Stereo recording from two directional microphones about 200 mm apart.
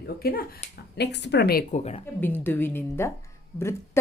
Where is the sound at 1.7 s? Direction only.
35° left (ahead or behind).